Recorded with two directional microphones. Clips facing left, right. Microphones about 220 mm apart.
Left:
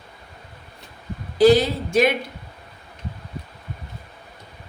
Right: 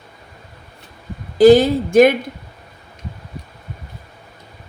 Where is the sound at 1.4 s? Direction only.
50° right (ahead or behind).